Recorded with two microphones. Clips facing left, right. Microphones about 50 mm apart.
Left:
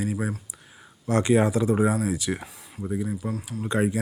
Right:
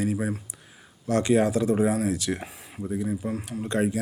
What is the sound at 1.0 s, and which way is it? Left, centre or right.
Speech, left.